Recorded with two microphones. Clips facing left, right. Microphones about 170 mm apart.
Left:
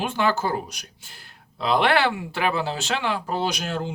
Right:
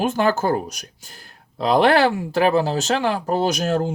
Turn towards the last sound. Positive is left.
turn(degrees=-45)  # may be behind; listen again after turning